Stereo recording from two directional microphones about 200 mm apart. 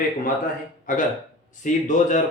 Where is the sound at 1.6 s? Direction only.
40° left (ahead or behind).